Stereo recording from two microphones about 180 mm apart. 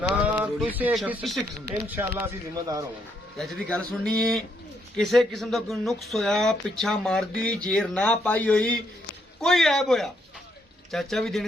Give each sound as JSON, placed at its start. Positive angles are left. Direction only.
{"t": 0.3, "sound": "speech", "side_deg": -5}
{"t": 1.7, "sound": "speech", "side_deg": -15}
{"t": 3.3, "sound": "speech", "side_deg": 0}